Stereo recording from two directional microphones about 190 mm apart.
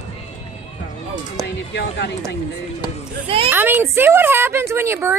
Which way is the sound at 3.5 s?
10° right (ahead or behind).